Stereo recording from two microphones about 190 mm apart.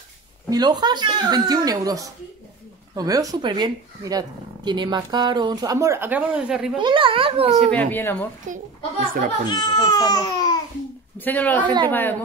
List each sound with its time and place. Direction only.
0.5 s speech: 20° right (ahead or behind); by 6.8 s 5° right (ahead or behind)
6.8 s speech: 25° right (ahead or behind)
7.7 s speech: 10° left (ahead or behind)
9.0 s a child's voice: 45° right (ahead or behind)
9.5 s speech: 20° left (ahead or behind)
11.1 s speech: 10° left (ahead or behind)
11.6 s speech: 25° right (ahead or behind)
11.9 s speech: 10° left (ahead or behind)